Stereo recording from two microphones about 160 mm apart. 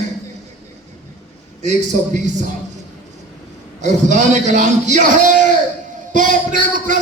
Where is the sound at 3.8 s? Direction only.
50° right (ahead or behind).